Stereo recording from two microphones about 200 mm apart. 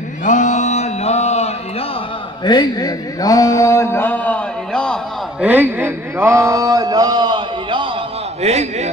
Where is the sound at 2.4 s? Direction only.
20° left (ahead or behind); by 5.0 s 5° left (ahead or behind).